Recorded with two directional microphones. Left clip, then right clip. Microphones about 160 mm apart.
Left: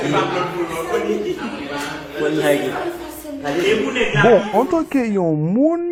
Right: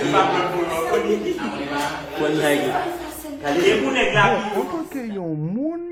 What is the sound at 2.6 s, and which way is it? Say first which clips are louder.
Speech: right 1 dB; 10° right (ahead or behind).